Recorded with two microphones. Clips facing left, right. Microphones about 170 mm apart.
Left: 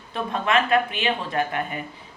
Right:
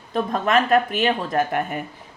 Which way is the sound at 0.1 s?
40° right (ahead or behind).